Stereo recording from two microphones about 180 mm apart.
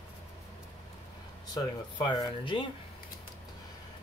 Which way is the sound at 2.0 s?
25° left (ahead or behind).